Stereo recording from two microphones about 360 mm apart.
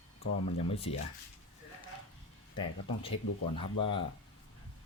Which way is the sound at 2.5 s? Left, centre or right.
Centre.